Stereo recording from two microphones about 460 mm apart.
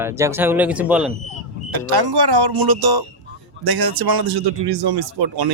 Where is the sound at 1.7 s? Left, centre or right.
Right.